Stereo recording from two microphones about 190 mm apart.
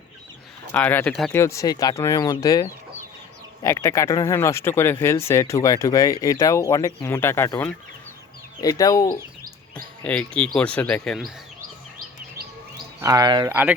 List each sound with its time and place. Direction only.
0.7 s speech: 10° left (ahead or behind)
1.4 s speech: 15° left (ahead or behind)
10.0 s speech: 5° left (ahead or behind)
13.0 s speech: 20° right (ahead or behind)